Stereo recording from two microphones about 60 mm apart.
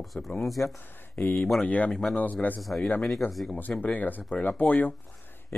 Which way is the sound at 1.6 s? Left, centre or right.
Left.